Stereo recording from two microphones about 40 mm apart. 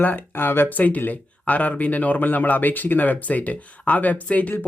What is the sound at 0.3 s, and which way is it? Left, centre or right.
Speech, left.